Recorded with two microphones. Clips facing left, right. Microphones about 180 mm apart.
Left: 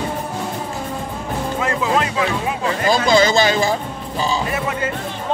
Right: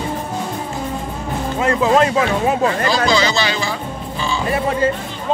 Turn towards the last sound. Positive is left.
turn(degrees=-30)  # may be behind; listen again after turning